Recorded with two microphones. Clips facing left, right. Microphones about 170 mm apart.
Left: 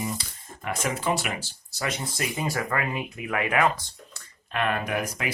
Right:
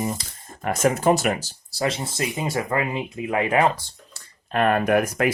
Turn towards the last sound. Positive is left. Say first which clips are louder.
# right 9 dB
turn(degrees=-55)  # may be behind; listen again after turning